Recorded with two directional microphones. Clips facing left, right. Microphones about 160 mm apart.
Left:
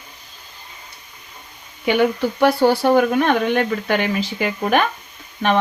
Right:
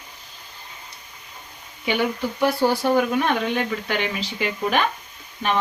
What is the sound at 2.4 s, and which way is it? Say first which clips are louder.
Speech: left 5 dB; 65° left (ahead or behind).